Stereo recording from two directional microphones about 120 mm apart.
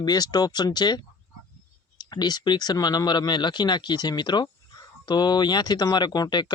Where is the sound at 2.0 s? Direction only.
35° left (ahead or behind).